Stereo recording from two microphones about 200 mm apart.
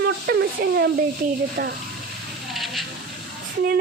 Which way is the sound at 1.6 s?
50° right (ahead or behind).